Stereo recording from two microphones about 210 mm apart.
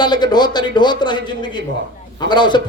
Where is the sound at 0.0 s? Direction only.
20° left (ahead or behind).